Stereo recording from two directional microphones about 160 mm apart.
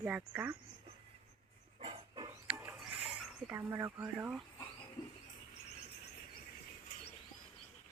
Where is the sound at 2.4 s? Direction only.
10° right (ahead or behind).